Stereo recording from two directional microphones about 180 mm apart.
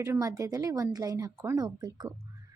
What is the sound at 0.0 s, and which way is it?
A woman's voice, 20° right (ahead or behind).